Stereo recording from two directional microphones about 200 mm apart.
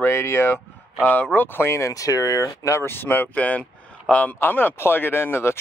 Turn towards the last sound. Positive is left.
turn(degrees=10)  # may be behind; listen again after turning